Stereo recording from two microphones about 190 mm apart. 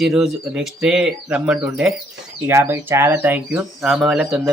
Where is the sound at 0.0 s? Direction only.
Centre (ahead or behind).